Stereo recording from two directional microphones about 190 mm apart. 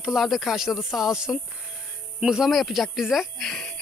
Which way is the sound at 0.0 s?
Centre (ahead or behind).